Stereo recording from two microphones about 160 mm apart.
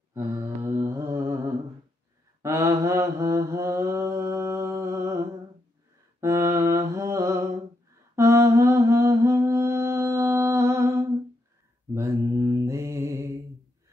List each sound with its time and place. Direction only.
0.1 s mantra: 15° right (ahead or behind)
6.2 s mantra: 15° right (ahead or behind)